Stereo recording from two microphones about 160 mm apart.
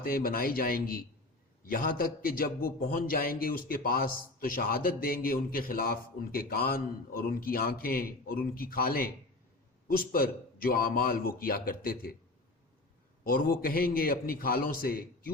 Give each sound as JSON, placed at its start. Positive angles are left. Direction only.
{"t": 0.0, "sound": "a man's voice", "side_deg": 65}
{"t": 13.2, "sound": "a man's voice", "side_deg": 65}